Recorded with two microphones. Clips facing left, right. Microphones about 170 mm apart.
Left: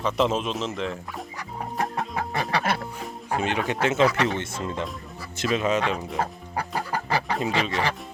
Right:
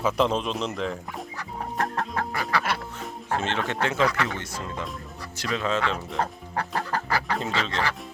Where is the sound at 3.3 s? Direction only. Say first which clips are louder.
Left 2 dB; 15° left (ahead or behind).